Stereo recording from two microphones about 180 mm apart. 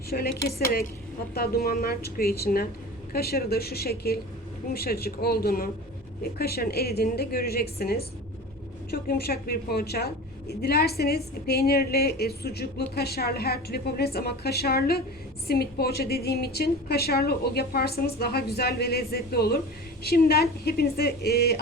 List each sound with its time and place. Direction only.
0.1 s a woman's voice: 60° left (ahead or behind)